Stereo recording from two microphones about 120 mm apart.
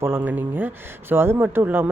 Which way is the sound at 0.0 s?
20° right (ahead or behind).